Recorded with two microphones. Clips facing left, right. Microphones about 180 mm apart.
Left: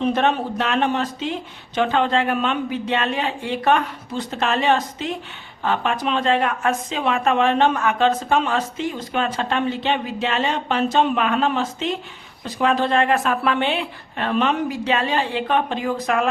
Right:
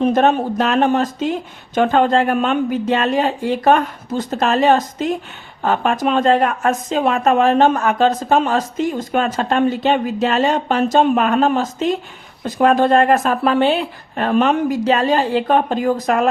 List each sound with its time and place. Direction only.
0.0 s a woman's voice: 45° right (ahead or behind)